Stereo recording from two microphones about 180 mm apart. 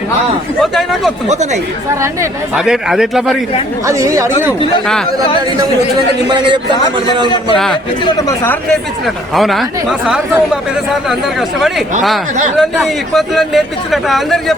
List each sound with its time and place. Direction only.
0.6 s speech: centre (ahead or behind)
2.6 s speech: centre (ahead or behind)
3.8 s speech: 15° right (ahead or behind)
6.2 s speech: 25° right (ahead or behind)
8.0 s speech: 20° left (ahead or behind)
9.3 s speech: centre (ahead or behind)
11.1 s speech: centre (ahead or behind)